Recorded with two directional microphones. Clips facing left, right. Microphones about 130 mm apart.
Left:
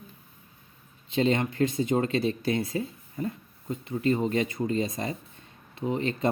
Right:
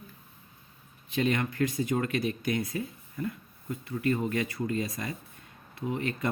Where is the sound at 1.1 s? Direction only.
25° left (ahead or behind).